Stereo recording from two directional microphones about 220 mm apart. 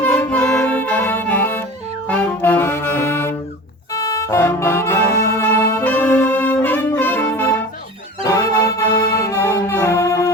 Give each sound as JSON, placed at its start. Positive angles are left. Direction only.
{"t": 0.0, "sound": "music", "side_deg": 5}